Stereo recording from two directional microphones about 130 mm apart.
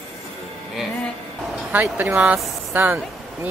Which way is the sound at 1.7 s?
15° right (ahead or behind).